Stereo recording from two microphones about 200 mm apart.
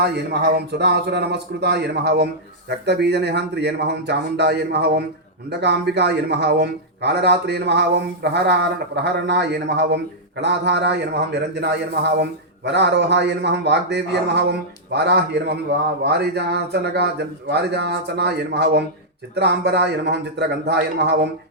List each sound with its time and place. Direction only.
0.0 s a man's voice: 55° right (ahead or behind)